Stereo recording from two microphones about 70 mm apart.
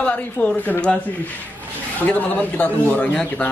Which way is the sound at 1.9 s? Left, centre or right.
Left.